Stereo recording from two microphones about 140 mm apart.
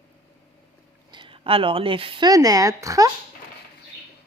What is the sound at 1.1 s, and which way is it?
A woman's voice, 35° right (ahead or behind).